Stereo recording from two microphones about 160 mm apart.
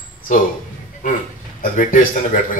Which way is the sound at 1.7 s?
55° left (ahead or behind).